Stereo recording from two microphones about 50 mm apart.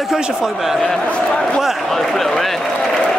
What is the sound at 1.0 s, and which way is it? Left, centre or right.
Speech, left.